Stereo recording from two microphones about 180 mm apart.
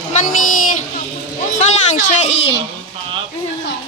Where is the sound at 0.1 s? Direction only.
40° left (ahead or behind).